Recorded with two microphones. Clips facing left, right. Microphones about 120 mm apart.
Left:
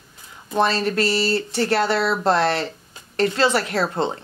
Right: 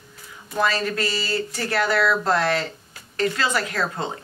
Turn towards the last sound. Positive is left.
turn(degrees=30)  # may be behind; listen again after turning